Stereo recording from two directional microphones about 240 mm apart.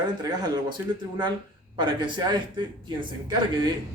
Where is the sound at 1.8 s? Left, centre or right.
Centre.